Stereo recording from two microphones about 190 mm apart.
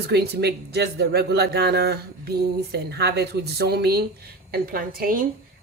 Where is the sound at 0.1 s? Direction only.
60° right (ahead or behind).